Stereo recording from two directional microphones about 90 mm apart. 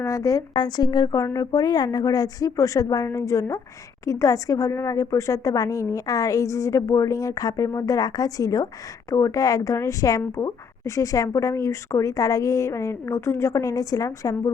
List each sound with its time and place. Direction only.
0.0 s a woman's voice: 35° left (ahead or behind)
0.5 s a woman's voice: 50° left (ahead or behind)